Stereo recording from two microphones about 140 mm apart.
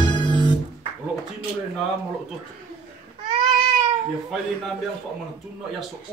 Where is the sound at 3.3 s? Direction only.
35° right (ahead or behind).